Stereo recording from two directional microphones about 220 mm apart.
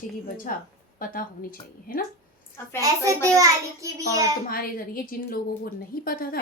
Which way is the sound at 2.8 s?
15° right (ahead or behind).